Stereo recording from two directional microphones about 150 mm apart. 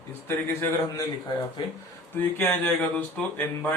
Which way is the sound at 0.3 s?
15° left (ahead or behind).